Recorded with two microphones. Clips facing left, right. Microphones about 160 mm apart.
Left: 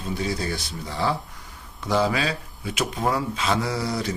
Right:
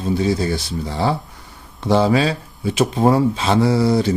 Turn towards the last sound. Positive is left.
turn(degrees=-30)  # may be behind; listen again after turning